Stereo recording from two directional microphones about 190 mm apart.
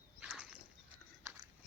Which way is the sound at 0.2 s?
5° right (ahead or behind).